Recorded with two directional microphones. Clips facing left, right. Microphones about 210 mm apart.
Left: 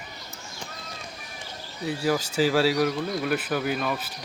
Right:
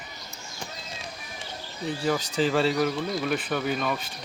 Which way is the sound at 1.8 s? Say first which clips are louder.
Left 1 dB; 5° left (ahead or behind).